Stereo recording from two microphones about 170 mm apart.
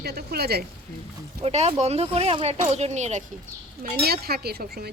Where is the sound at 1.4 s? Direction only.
40° right (ahead or behind).